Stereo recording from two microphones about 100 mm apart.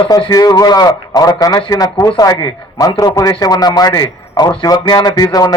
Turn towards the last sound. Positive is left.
turn(degrees=40)  # may be behind; listen again after turning